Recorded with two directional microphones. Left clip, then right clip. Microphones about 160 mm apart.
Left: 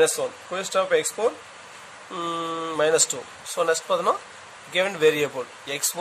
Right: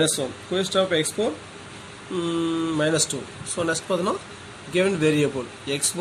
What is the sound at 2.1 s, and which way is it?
Speech, 70° left (ahead or behind).